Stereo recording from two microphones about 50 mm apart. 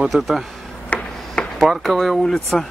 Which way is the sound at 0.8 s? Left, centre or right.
Centre.